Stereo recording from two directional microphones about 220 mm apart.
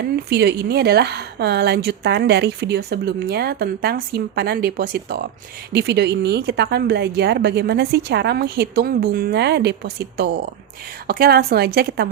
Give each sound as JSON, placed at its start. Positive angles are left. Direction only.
{"t": 0.3, "sound": "a woman's voice", "side_deg": -50}